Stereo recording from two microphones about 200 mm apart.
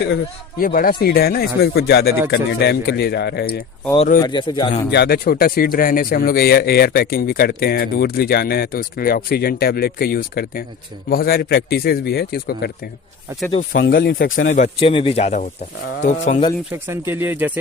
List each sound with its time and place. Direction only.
0.6 s speech: 45° left (ahead or behind)
4.2 s a man's voice: 25° left (ahead or behind)
4.9 s speech: 55° left (ahead or behind)
13.5 s a man's voice: 35° left (ahead or behind)
13.8 s speech: 55° left (ahead or behind)
14.3 s a man's voice: 35° left (ahead or behind)
16.7 s speech: 10° right (ahead or behind)